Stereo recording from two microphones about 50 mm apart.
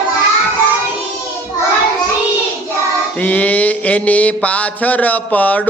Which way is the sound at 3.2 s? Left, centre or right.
Left.